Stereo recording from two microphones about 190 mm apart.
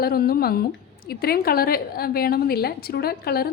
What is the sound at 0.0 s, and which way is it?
A woman's voice, 55° left (ahead or behind).